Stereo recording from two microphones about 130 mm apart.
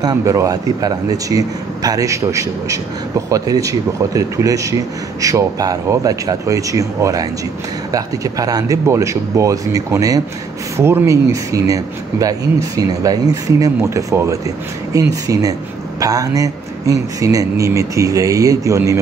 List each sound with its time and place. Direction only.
0.0 s a man's voice: 30° right (ahead or behind)